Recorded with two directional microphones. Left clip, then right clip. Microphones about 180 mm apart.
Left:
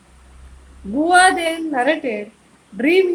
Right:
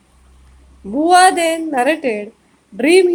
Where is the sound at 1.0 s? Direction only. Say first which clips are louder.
Right 3 dB; 45° right (ahead or behind).